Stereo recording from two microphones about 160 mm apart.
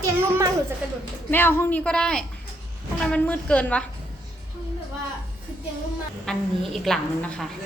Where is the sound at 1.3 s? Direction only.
15° left (ahead or behind).